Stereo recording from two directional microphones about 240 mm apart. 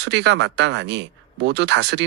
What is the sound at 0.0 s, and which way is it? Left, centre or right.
Speech, right.